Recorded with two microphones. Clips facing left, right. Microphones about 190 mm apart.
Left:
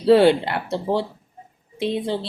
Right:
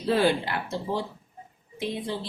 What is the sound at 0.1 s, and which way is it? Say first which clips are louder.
Speech: left 9 dB; 65° left (ahead or behind).